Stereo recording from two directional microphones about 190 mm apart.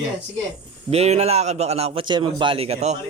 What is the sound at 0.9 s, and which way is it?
A man's voice, 35° right (ahead or behind).